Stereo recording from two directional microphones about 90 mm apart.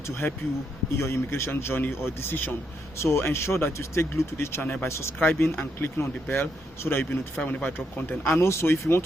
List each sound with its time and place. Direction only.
0.9 s speech: 30° left (ahead or behind)